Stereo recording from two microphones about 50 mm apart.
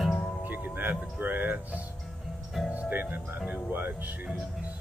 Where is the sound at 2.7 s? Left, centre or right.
Right.